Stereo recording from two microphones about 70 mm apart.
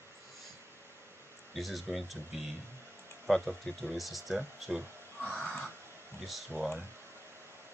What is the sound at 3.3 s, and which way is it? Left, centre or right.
Speech, centre.